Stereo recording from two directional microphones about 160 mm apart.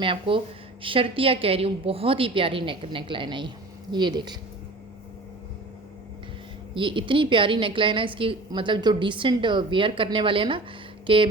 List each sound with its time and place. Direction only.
0.0 s a woman's voice: 35° right (ahead or behind)
6.7 s a woman's voice: 30° right (ahead or behind)